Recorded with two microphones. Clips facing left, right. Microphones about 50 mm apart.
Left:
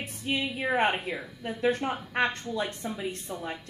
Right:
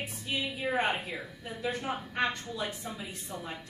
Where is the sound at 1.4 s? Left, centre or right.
Left.